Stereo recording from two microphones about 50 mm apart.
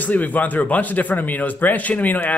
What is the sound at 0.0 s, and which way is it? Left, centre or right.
Speech, left.